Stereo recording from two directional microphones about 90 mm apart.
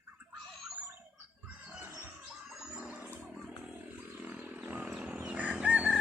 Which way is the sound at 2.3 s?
5° right (ahead or behind).